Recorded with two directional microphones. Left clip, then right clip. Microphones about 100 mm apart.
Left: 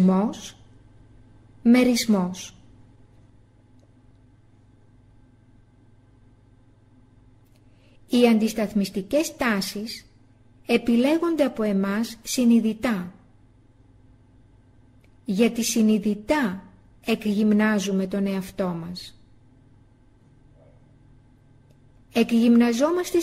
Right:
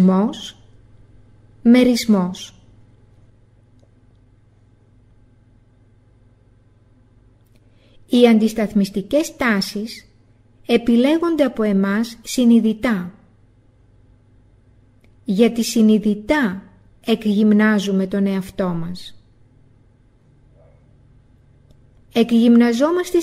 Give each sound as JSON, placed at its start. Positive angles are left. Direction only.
{"t": 0.0, "sound": "a woman's voice", "side_deg": -25}
{"t": 1.6, "sound": "a woman's voice", "side_deg": -25}
{"t": 8.1, "sound": "a woman's voice", "side_deg": -30}
{"t": 15.2, "sound": "a woman's voice", "side_deg": -25}
{"t": 22.1, "sound": "a woman's voice", "side_deg": -25}